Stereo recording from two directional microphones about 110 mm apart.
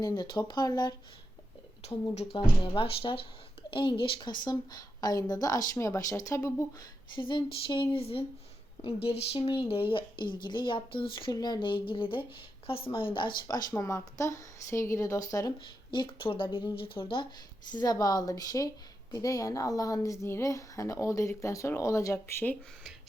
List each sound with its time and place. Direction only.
0.0 s a woman's voice: 40° left (ahead or behind)
2.1 s a woman's voice: 60° left (ahead or behind); by 6.8 s 30° left (ahead or behind)
7.2 s a woman's voice: 45° left (ahead or behind)
15.9 s speech: 50° left (ahead or behind)
17.7 s a woman's voice: 40° left (ahead or behind); by 22.5 s 20° left (ahead or behind)